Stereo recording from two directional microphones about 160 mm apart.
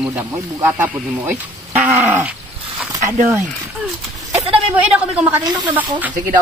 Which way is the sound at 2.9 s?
20° right (ahead or behind).